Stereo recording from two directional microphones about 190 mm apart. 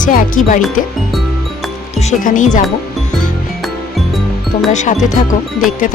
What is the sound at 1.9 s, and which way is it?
Speech, 45° left (ahead or behind).